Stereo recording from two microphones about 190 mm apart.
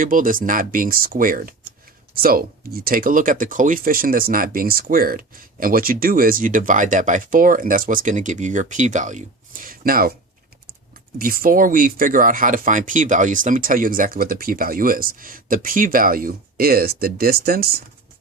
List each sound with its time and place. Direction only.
0.0 s speech: 45° right (ahead or behind)
11.2 s speech: 50° right (ahead or behind)